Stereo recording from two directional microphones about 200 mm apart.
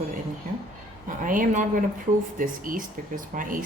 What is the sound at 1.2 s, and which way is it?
Speech, 40° right (ahead or behind).